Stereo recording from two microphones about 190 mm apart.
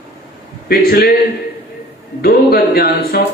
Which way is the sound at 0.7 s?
55° left (ahead or behind).